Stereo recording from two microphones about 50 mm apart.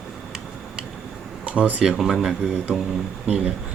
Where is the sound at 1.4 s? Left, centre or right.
Right.